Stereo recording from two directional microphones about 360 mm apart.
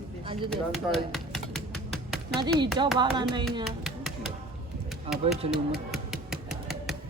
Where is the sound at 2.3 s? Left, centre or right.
Centre.